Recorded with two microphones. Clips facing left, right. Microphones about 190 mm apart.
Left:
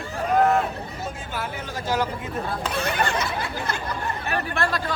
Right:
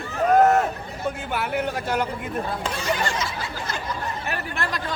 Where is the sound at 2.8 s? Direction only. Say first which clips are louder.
Left 3 dB; 60° left (ahead or behind).